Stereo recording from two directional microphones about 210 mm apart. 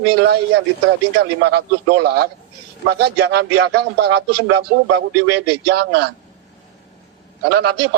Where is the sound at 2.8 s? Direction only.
50° right (ahead or behind).